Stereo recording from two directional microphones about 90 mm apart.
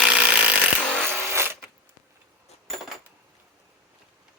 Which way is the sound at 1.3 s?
30° right (ahead or behind).